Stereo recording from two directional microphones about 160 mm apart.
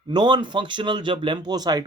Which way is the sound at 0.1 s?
30° right (ahead or behind).